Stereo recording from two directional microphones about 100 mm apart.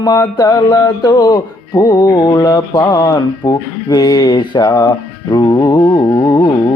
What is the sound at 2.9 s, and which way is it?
Speech, 45° left (ahead or behind).